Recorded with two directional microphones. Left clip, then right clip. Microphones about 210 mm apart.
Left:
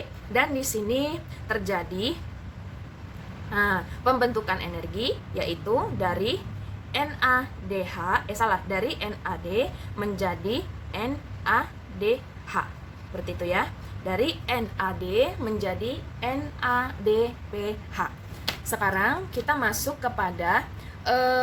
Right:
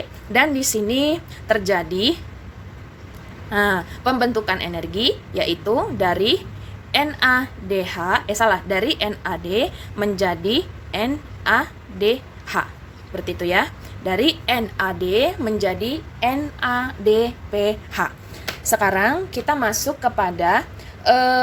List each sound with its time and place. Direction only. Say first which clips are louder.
0.3 s a woman's voice: right 7 dB; 35° right (ahead or behind)
3.5 s a woman's voice: right 5 dB; 35° right (ahead or behind)